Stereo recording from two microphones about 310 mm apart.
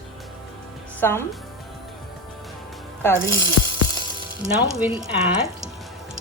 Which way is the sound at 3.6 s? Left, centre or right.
Left.